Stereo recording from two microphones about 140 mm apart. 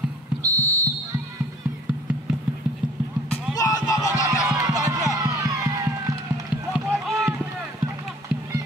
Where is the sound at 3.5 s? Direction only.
25° left (ahead or behind).